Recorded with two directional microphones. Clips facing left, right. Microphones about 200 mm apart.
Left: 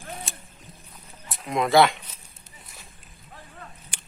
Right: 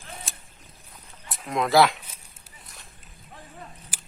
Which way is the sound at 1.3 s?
Centre (ahead or behind).